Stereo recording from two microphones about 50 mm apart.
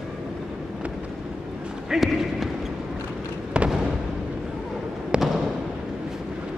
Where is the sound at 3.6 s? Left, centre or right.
Right.